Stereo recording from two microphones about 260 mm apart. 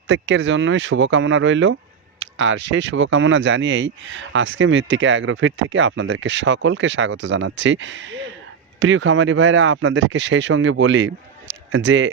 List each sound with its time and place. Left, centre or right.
0.1 s speech: right
2.1 s a sound: right
2.6 s speech: right